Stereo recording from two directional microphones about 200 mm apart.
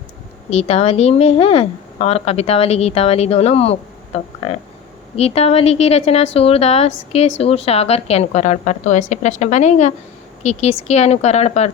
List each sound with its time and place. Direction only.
0.5 s a woman's voice: 30° left (ahead or behind)